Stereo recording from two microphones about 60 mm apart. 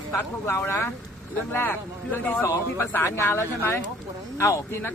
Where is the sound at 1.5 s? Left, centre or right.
Left.